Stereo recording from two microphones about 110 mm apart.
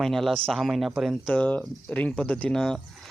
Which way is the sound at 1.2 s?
15° left (ahead or behind).